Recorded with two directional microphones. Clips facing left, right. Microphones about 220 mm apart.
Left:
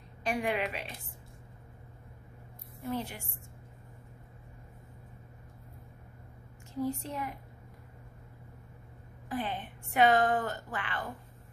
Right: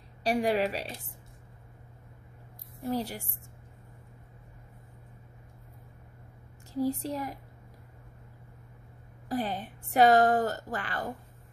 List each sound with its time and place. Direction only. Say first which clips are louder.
0.2 s a woman's voice: right 5 dB; 35° right (ahead or behind)
2.9 s a woman's voice: right 4 dB; 35° right (ahead or behind)
6.8 s a woman's voice: right 4 dB; 35° right (ahead or behind)
9.3 s a woman's voice: right 4 dB; 40° right (ahead or behind)